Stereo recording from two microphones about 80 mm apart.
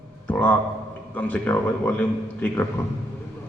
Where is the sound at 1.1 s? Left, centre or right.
Left.